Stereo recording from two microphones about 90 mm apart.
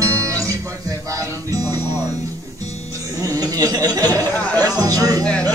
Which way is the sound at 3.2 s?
40° right (ahead or behind).